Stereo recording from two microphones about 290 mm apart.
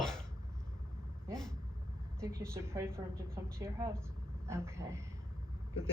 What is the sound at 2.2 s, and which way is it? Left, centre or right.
Speech, centre.